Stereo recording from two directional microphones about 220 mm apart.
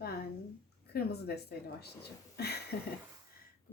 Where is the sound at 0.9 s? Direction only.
45° left (ahead or behind).